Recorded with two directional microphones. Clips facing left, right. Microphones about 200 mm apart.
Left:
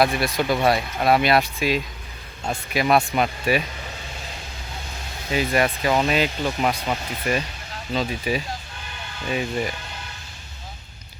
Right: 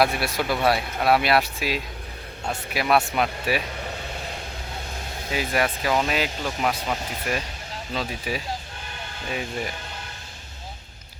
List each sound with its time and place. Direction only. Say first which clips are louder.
0.0 s speech: left 2 dB; 5° right (ahead or behind)
3.8 s vehicle: right 4 dB; 55° right (ahead or behind)
5.3 s speech: left 3 dB; 5° right (ahead or behind)